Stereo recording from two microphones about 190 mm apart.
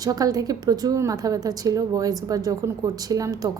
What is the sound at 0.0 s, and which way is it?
A woman's voice, 20° right (ahead or behind).